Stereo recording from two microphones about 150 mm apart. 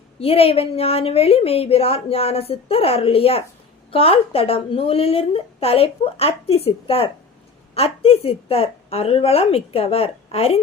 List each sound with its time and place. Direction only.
0.2 s a woman's voice: 40° left (ahead or behind)